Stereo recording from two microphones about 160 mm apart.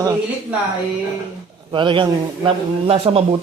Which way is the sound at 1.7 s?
30° right (ahead or behind).